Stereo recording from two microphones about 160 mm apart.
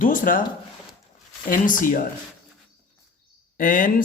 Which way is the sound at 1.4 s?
55° left (ahead or behind).